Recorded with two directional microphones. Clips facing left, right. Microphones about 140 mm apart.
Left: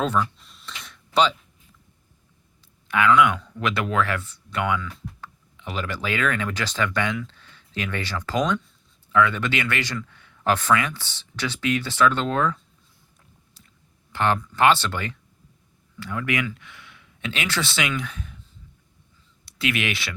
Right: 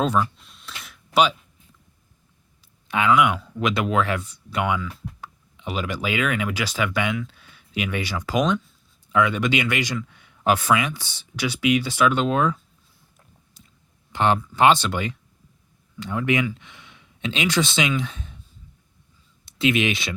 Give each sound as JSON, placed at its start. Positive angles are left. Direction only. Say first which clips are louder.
{"t": 0.0, "sound": "speech", "louder": "right 2 dB", "side_deg": -15}
{"t": 0.3, "sound": "a sound", "louder": "even", "side_deg": 0}
{"t": 2.6, "sound": "speech", "louder": "left 1 dB", "side_deg": -20}
{"t": 13.6, "sound": "chewing", "louder": "right 4 dB", "side_deg": -20}
{"t": 14.1, "sound": "speech", "louder": "right 2 dB", "side_deg": -15}
{"t": 19.5, "sound": "speech", "louder": "right 5 dB", "side_deg": -20}